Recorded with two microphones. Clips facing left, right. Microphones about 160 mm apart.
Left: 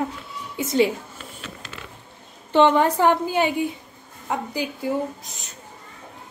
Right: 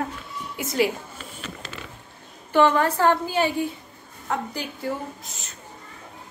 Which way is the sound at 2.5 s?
20° left (ahead or behind).